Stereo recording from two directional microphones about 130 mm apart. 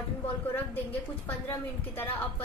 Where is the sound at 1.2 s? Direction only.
15° left (ahead or behind).